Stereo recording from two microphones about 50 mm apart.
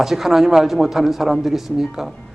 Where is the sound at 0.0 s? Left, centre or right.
Centre.